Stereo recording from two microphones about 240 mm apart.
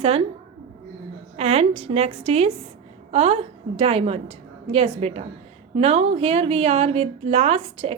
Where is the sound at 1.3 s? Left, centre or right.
Right.